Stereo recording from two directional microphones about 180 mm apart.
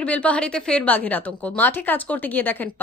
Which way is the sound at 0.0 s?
5° left (ahead or behind).